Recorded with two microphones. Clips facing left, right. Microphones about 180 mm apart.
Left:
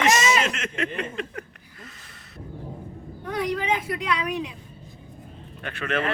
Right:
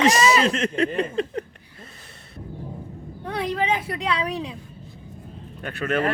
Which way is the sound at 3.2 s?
25° right (ahead or behind).